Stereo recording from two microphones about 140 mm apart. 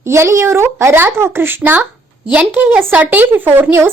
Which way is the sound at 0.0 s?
20° right (ahead or behind).